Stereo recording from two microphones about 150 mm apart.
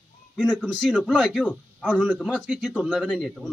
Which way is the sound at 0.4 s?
5° left (ahead or behind).